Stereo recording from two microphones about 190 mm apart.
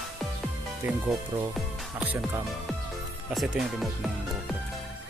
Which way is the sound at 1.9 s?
10° right (ahead or behind).